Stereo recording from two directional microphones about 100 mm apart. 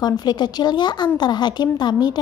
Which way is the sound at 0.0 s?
45° left (ahead or behind).